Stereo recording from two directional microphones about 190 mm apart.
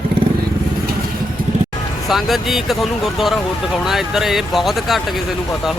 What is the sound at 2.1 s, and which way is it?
Speech, centre (ahead or behind).